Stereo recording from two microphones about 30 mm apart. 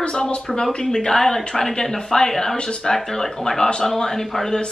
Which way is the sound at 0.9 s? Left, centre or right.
Left.